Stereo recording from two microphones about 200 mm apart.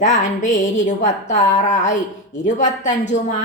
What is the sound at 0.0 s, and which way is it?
A woman's voice, 40° left (ahead or behind).